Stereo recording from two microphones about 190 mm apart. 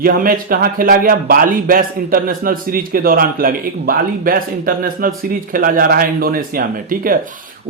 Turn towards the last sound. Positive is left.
turn(degrees=-50)  # may be behind; listen again after turning